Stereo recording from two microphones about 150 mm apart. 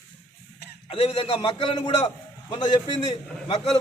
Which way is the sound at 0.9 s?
40° left (ahead or behind).